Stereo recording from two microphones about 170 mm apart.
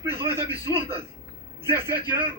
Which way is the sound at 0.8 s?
35° right (ahead or behind).